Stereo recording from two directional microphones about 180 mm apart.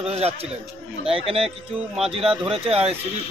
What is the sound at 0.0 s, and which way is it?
Speech, 35° right (ahead or behind).